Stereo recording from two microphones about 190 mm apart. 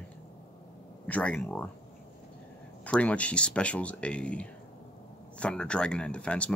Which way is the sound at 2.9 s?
5° left (ahead or behind).